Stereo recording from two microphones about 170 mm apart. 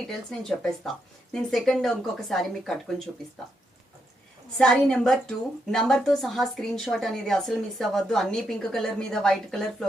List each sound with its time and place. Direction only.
0.1 s a woman's voice: 5° left (ahead or behind)
4.5 s a woman's voice: 5° left (ahead or behind)